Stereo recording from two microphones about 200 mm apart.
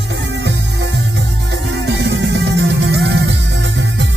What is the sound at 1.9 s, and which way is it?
Music, 65° right (ahead or behind).